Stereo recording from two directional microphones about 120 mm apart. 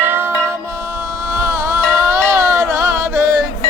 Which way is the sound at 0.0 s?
20° right (ahead or behind).